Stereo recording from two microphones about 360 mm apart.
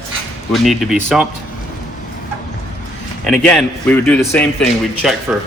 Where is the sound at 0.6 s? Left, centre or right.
Centre.